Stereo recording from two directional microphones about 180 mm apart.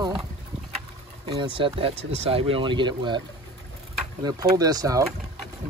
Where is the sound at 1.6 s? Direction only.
30° right (ahead or behind).